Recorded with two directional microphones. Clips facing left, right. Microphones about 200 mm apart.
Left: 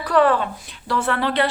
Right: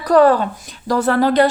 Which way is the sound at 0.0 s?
40° right (ahead or behind).